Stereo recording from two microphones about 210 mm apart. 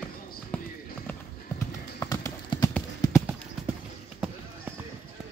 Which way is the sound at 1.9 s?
15° left (ahead or behind).